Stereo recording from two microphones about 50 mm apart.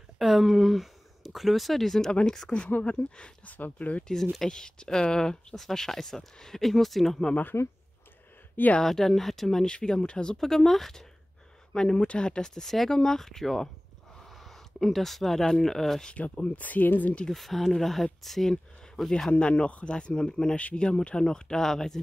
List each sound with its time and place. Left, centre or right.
0.2 s speech: centre
2.8 s speech: left
4.4 s speech: centre
7.6 s speech: left
8.8 s speech: centre
9.7 s speech: centre
16.1 s speech: left
17.3 s speech: centre
19.3 s speech: left